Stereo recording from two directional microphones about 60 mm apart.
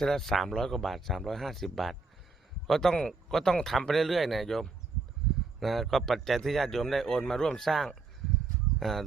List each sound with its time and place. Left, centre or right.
0.0 s a man's voice: centre